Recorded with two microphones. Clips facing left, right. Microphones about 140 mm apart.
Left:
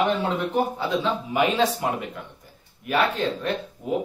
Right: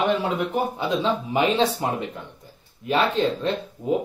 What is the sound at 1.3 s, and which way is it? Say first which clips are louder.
Speech: even; 25° right (ahead or behind).